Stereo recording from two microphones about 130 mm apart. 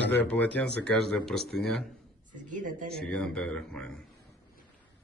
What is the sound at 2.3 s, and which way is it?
Speech, 80° right.